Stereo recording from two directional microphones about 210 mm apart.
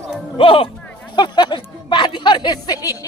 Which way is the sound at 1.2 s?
20° left (ahead or behind).